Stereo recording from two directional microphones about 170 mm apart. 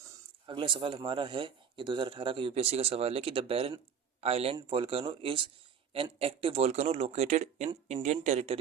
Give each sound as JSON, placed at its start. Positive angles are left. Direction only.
{"t": 0.4, "sound": "speech", "side_deg": -30}